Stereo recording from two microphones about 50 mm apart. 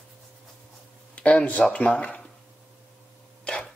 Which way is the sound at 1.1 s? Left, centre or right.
Left.